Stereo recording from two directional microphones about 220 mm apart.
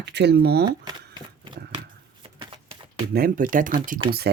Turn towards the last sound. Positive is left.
turn(degrees=-40)  # may be behind; listen again after turning